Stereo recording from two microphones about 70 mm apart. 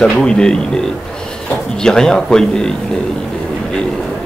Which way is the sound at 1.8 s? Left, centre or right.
Centre.